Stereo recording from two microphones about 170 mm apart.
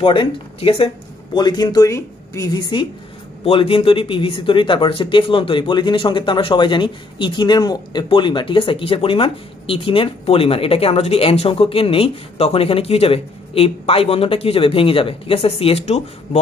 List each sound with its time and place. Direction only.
0.0 s speech: 30° left (ahead or behind)